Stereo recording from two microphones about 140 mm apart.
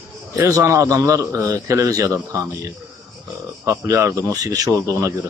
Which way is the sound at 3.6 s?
20° right (ahead or behind).